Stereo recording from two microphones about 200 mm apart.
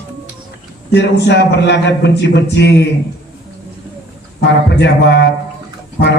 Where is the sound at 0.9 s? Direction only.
60° left (ahead or behind).